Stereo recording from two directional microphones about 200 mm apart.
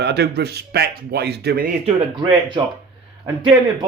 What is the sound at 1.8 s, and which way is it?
Speech, 25° right (ahead or behind).